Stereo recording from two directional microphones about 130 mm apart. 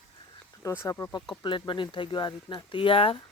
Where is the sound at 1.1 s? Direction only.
35° left (ahead or behind).